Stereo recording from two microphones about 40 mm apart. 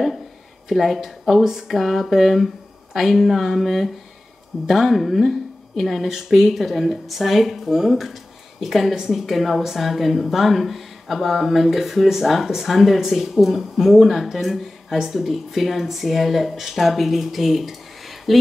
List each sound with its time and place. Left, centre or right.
0.7 s speech: centre